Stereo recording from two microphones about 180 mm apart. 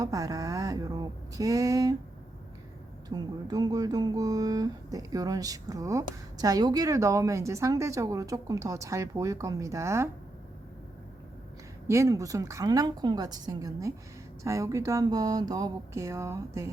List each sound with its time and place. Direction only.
0.0 s a sound: 20° right (ahead or behind)
3.1 s speech: 20° right (ahead or behind)
11.9 s speech: 15° right (ahead or behind)